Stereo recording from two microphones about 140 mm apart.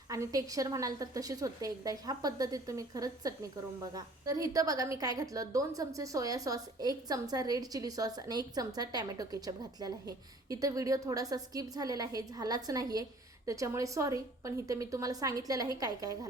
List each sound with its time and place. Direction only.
0.1 s a woman's voice: 25° right (ahead or behind)